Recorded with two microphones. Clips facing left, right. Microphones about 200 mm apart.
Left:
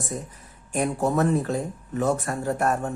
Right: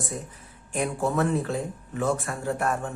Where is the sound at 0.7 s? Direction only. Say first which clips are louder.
Left 3 dB; 40° left (ahead or behind).